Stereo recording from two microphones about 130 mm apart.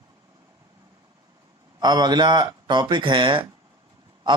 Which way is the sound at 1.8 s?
30° right (ahead or behind).